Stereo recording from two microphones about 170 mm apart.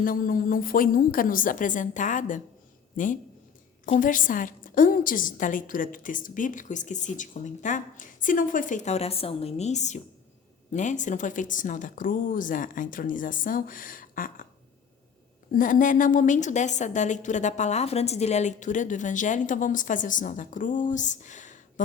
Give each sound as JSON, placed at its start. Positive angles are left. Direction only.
{"t": 0.0, "sound": "a woman's voice", "side_deg": 55}
{"t": 15.5, "sound": "a woman's voice", "side_deg": 55}